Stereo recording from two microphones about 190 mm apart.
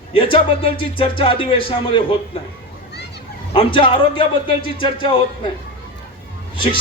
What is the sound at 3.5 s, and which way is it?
A man's voice, 25° left (ahead or behind).